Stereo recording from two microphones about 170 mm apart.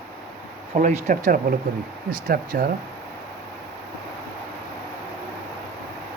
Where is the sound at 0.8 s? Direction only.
45° right (ahead or behind).